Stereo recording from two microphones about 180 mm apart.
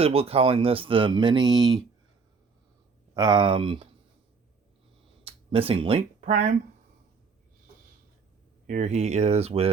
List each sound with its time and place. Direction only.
0.0 s speech: 35° right (ahead or behind)
3.2 s speech: 25° right (ahead or behind)
5.2 s speech: 30° right (ahead or behind)
8.6 s speech: 45° right (ahead or behind)